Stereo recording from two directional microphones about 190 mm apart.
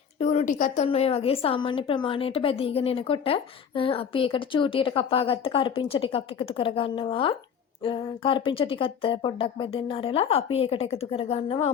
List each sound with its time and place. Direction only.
0.2 s a woman's voice: 35° left (ahead or behind)